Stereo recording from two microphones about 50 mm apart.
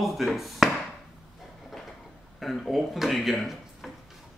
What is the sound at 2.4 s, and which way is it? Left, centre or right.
Speech, centre.